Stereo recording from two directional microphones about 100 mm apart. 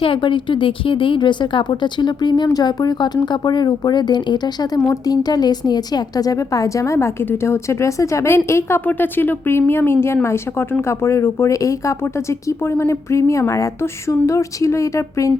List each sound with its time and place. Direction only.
0.0 s a woman's voice: 60° left (ahead or behind); by 15.3 s 30° left (ahead or behind)